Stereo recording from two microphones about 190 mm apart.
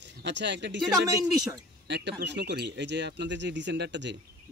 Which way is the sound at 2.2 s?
65° right (ahead or behind).